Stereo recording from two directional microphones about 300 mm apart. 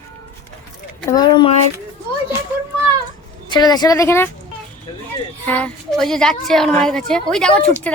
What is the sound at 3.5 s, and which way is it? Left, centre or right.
Speech, centre.